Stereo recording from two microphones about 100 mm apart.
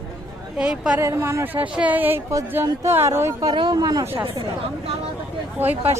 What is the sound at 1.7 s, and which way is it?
Speech, 15° right (ahead or behind).